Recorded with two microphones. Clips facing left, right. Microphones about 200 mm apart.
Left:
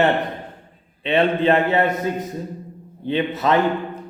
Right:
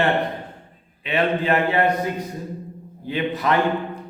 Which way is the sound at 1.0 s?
25° left (ahead or behind).